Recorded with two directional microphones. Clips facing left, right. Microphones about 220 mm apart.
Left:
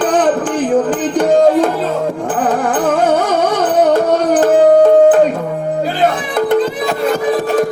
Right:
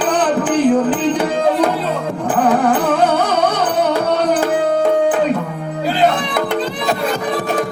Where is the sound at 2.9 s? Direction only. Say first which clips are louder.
Left 2 dB; 45° left (ahead or behind).